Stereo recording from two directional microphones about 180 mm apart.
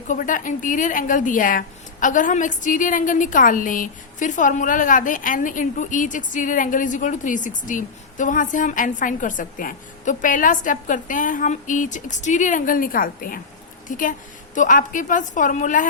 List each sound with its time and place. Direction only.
0.1 s a woman's voice: 45° left (ahead or behind)